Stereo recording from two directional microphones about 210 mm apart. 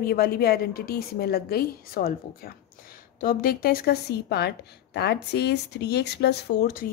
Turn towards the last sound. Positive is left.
turn(degrees=45)  # may be behind; listen again after turning